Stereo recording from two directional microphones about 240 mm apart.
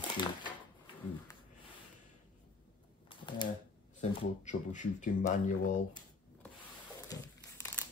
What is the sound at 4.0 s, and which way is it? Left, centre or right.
Speech, left.